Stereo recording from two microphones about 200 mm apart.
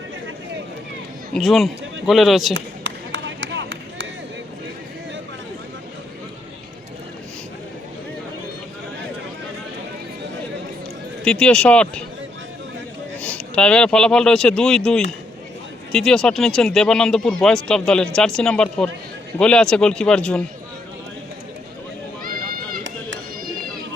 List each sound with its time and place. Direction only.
1.3 s speech: centre (ahead or behind)
2.5 s a sound: 65° right (ahead or behind)
11.3 s speech: 5° left (ahead or behind)
13.1 s speech: 5° left (ahead or behind)
22.8 s run: 65° right (ahead or behind)